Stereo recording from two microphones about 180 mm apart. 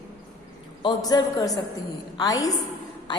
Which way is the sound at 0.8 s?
25° left (ahead or behind).